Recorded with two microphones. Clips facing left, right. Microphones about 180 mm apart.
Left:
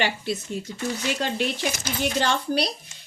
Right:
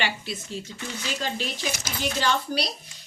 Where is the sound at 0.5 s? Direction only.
60° left (ahead or behind).